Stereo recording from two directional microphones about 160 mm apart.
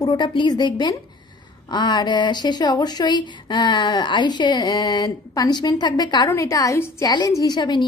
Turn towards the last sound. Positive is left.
turn(degrees=30)  # may be behind; listen again after turning